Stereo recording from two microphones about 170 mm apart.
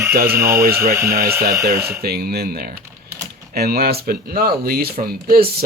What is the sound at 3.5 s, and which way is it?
Speech, 65° right (ahead or behind).